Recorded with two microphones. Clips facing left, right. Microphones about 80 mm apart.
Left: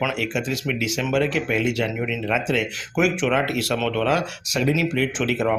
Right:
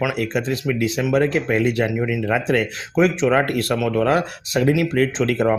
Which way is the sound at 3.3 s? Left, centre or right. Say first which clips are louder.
Right 4 dB; right.